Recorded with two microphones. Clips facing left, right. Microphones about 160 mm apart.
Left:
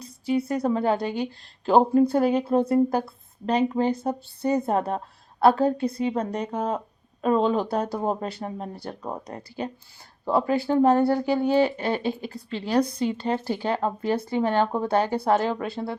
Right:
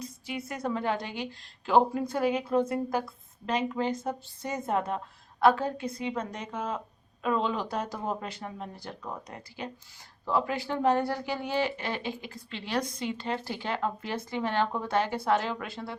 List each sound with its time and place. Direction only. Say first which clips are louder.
0.0 s speech: left 11 dB; 30° left (ahead or behind)